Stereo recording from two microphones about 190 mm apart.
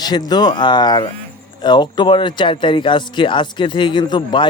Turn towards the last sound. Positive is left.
turn(degrees=25)  # may be behind; listen again after turning